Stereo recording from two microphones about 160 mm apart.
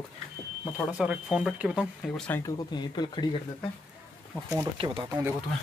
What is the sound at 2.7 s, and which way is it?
Speech, 30° left (ahead or behind).